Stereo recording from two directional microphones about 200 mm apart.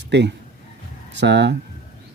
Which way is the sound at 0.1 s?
60° right (ahead or behind).